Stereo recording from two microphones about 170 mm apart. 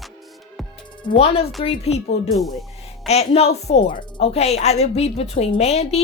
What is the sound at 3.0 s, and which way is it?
A woman's voice, 40° left (ahead or behind).